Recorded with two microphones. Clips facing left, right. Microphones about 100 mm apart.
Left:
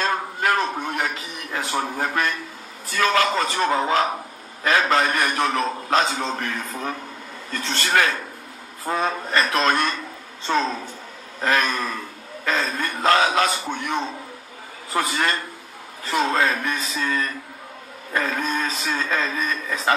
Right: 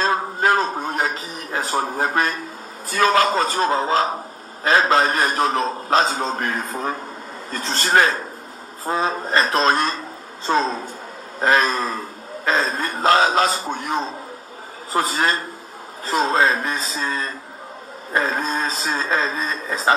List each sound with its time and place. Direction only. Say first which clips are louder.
0.0 s music: right 3 dB; 35° right (ahead or behind)
2.9 s a man's voice: right 3 dB; 40° right (ahead or behind)